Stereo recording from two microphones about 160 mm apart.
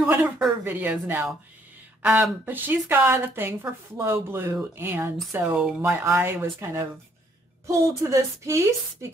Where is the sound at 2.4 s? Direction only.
10° right (ahead or behind).